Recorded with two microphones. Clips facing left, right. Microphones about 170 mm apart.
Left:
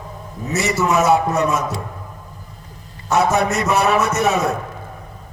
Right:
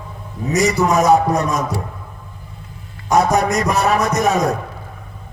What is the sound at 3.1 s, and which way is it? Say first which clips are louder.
A man's voice: right 2 dB; 35° right (ahead or behind).